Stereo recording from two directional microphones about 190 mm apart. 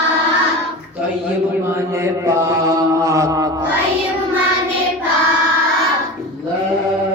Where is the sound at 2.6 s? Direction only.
15° right (ahead or behind).